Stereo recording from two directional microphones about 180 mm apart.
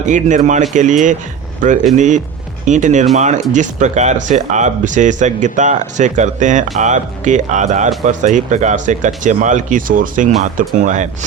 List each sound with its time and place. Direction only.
0.0 s speech: 45° right (ahead or behind)